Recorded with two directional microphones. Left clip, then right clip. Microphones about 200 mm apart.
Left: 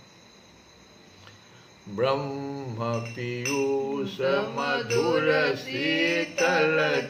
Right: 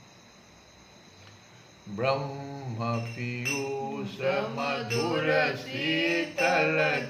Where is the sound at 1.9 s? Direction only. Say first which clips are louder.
Left 3 dB; 10° left (ahead or behind).